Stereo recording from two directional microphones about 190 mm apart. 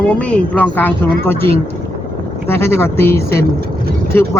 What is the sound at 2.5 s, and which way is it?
Speech, 15° left (ahead or behind).